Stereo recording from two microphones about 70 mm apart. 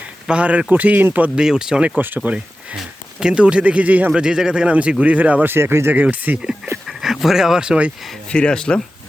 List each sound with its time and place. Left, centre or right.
0.3 s speech: centre
1.4 s speech: centre
2.0 s speech: right
2.7 s a man's voice: centre
4.1 s speech: centre; by 5.9 s right
5.9 s speech: right
6.8 s speech: centre
8.3 s speech: centre